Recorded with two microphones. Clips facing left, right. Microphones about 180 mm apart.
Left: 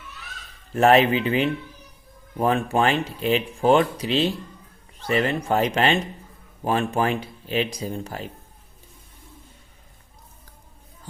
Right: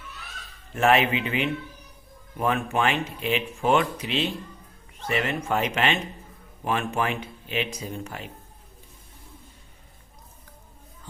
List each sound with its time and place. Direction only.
0.7 s speech: 35° left (ahead or behind)